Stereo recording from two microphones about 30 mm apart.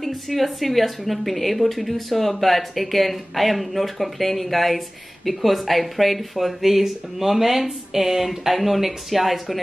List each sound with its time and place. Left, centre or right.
0.0 s a woman's voice: centre